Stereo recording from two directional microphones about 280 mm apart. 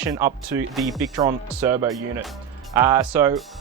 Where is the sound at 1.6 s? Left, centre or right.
Centre.